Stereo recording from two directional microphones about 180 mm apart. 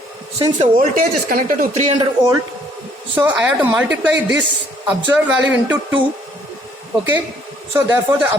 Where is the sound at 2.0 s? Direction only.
20° right (ahead or behind).